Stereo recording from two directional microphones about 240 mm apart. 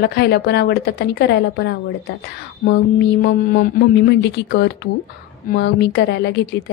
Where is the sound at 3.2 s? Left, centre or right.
Left.